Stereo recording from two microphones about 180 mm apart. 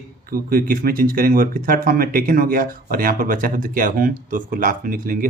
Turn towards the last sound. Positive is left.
turn(degrees=-50)  # may be behind; listen again after turning